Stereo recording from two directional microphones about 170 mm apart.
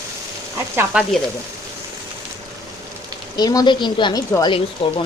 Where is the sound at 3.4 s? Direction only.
25° left (ahead or behind).